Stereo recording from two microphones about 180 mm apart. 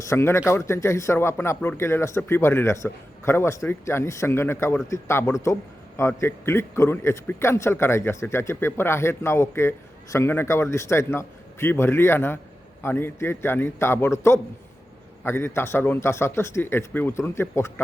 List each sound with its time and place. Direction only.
0.1 s a man's voice: 15° left (ahead or behind)